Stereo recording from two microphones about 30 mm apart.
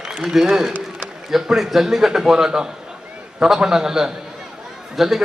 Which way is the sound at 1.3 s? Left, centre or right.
Centre.